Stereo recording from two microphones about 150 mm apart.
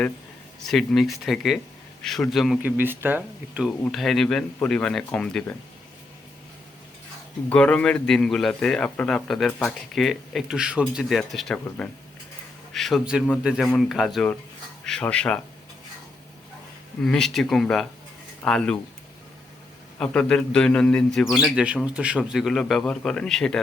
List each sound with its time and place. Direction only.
0.6 s a man's voice: centre (ahead or behind)
2.6 s speech: 10° right (ahead or behind)
3.9 s a man's voice: centre (ahead or behind)
7.5 s a man's voice: 10° left (ahead or behind)
12.7 s a man's voice: centre (ahead or behind)
17.0 s a man's voice: 5° left (ahead or behind)
20.0 s a man's voice: 5° left (ahead or behind)